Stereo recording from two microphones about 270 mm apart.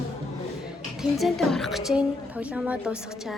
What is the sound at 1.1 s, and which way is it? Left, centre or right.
A woman's voice, centre.